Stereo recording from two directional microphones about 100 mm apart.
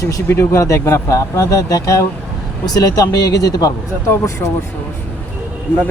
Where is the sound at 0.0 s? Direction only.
30° left (ahead or behind).